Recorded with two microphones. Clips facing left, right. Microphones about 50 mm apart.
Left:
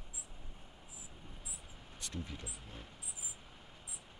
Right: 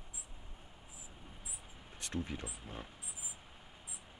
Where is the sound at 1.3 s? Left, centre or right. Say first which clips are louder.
Even; centre.